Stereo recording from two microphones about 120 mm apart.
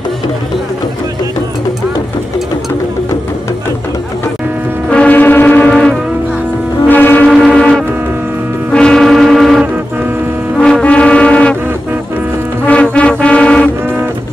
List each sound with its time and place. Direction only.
4.8 s foghorn: 10° left (ahead or behind)
6.9 s a sound: 15° left (ahead or behind)
7.2 s music: 5° left (ahead or behind)
8.7 s foghorn: 5° left (ahead or behind)
10.6 s music: 10° left (ahead or behind)
12.6 s music: 10° left (ahead or behind)